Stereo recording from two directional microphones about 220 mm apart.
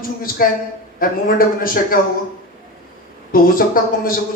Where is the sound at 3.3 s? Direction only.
40° left (ahead or behind).